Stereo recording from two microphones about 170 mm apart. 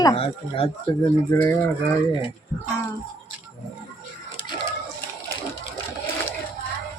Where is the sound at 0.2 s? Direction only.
35° left (ahead or behind).